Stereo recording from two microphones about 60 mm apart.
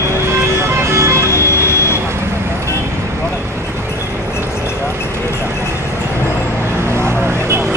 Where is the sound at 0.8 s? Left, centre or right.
Right.